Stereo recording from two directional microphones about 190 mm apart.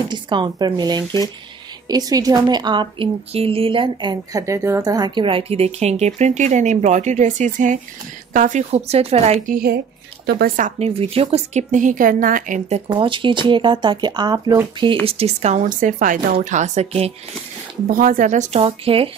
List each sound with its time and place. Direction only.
0.1 s a woman's voice: 25° right (ahead or behind)
10.2 s a woman's voice: 50° right (ahead or behind); by 15.0 s 20° right (ahead or behind)
15.0 s speech: 30° right (ahead or behind)
17.8 s speech: 45° right (ahead or behind); by 19.0 s 30° right (ahead or behind)